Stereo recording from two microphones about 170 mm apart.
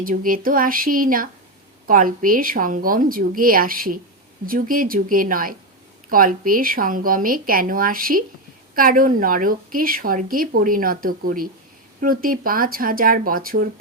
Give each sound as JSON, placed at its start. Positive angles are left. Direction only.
{"t": 0.0, "sound": "speech", "side_deg": -55}